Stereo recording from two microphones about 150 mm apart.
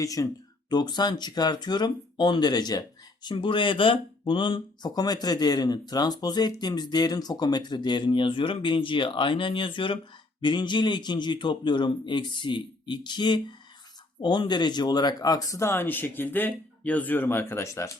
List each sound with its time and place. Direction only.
0.0 s speech: 20° left (ahead or behind)